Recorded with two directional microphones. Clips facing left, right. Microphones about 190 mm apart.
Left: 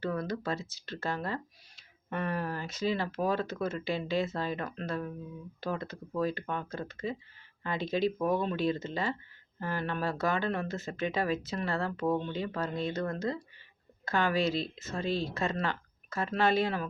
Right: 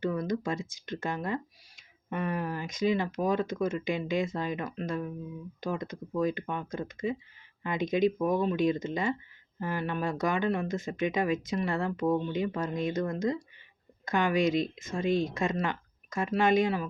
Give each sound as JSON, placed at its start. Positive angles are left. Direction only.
{"t": 0.0, "sound": "speech", "side_deg": -15}